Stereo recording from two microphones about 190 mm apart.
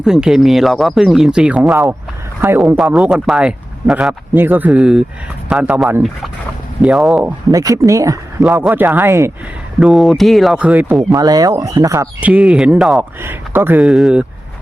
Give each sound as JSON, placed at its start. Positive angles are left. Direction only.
{"t": 0.0, "sound": "speech", "side_deg": -5}
{"t": 2.7, "sound": "speech", "side_deg": 0}
{"t": 7.5, "sound": "speech", "side_deg": -15}
{"t": 8.4, "sound": "speech", "side_deg": -5}
{"t": 9.8, "sound": "speech", "side_deg": 0}
{"t": 11.1, "sound": "speech", "side_deg": -20}